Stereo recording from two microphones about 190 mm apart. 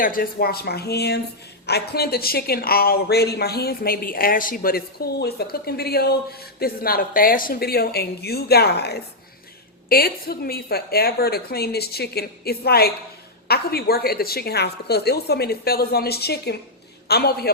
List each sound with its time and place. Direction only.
0.0 s a woman's voice: 50° left (ahead or behind)